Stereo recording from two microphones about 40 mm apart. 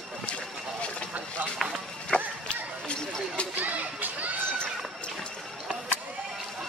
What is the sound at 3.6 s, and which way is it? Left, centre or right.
Children playing, right.